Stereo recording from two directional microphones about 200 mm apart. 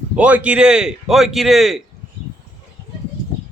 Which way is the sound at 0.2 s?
5° right (ahead or behind).